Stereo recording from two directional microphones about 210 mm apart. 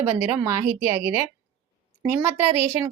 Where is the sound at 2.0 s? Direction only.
10° right (ahead or behind).